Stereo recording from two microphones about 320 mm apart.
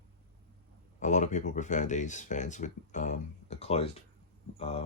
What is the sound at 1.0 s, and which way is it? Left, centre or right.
Speech, left.